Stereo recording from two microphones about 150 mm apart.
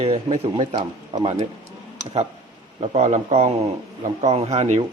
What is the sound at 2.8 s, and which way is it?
Speech, 50° right (ahead or behind).